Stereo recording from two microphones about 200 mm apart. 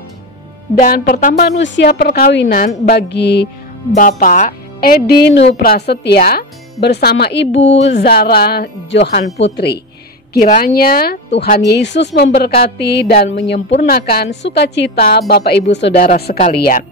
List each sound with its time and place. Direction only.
0.7 s a woman's voice: 45° left (ahead or behind)
3.9 s a woman's voice: 40° left (ahead or behind)
10.3 s a woman's voice: 40° left (ahead or behind)